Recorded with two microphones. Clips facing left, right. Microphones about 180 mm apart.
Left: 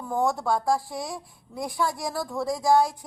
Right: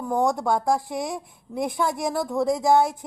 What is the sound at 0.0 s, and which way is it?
A woman's voice, 15° right (ahead or behind).